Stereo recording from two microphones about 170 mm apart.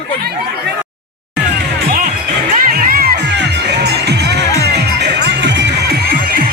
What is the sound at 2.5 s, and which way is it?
Music, 55° right (ahead or behind).